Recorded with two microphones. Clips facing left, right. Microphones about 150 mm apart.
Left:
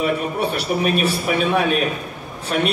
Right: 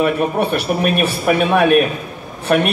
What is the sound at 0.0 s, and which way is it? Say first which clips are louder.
A man's voice: right 4 dB; 60° right (ahead or behind).